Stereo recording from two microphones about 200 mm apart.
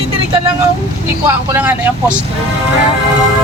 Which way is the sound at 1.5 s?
10° right (ahead or behind).